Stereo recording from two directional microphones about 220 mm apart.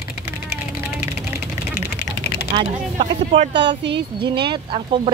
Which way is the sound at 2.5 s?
30° right (ahead or behind).